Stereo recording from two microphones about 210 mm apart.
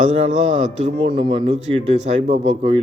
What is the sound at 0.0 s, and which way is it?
A man's voice, 35° right (ahead or behind).